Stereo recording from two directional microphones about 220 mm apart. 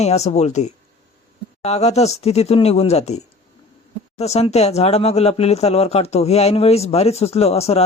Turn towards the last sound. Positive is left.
turn(degrees=30)  # may be behind; listen again after turning